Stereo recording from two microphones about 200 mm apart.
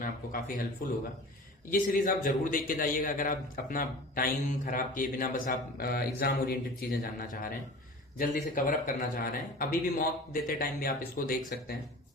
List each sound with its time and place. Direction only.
0.0 s a man's voice: 45° left (ahead or behind)